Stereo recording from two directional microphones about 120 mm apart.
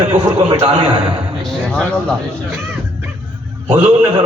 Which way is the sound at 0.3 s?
40° right (ahead or behind).